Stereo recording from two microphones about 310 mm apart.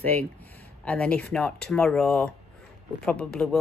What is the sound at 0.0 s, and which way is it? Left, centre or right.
Speech, centre.